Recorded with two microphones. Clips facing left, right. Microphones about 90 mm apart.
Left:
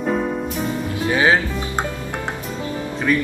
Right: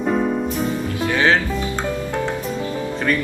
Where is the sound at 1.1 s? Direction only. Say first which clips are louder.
Left 1 dB; 15° left (ahead or behind).